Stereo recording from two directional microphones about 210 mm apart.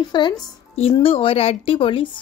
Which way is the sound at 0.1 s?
20° left (ahead or behind).